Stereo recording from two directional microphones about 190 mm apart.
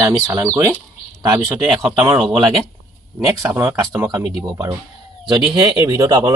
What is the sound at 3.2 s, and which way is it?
A man's voice, 15° right (ahead or behind).